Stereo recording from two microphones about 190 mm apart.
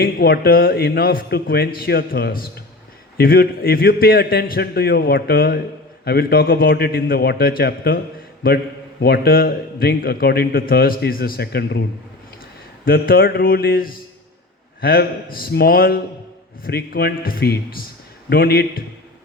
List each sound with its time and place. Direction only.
0.0 s a man's voice: 55° left (ahead or behind)